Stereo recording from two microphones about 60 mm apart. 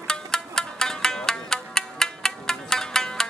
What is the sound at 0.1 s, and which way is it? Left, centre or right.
Music, centre.